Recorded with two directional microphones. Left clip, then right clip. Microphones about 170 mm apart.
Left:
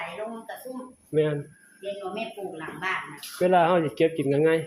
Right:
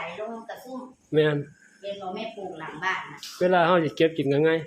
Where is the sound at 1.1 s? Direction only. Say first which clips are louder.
Right 2 dB; 15° right (ahead or behind).